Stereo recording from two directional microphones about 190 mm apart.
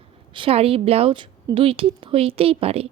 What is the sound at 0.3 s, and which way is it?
A woman's voice, 30° right (ahead or behind).